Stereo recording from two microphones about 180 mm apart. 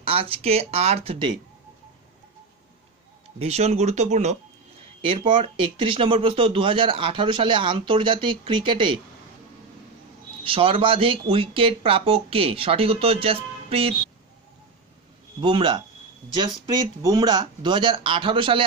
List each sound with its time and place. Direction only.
0.0 s speech: 30° right (ahead or behind)
3.3 s speech: 35° right (ahead or behind)
10.4 s speech: 30° right (ahead or behind)
15.4 s speech: 25° right (ahead or behind)
17.0 s speech: 20° right (ahead or behind)